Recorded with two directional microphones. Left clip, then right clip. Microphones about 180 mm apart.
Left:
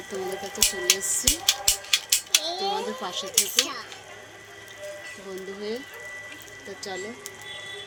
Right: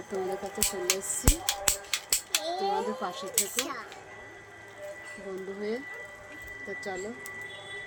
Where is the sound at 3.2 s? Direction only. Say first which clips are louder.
Left 11 dB; 5° right (ahead or behind).